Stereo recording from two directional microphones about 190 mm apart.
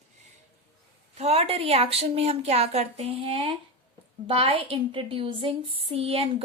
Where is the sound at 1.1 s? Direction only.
35° right (ahead or behind).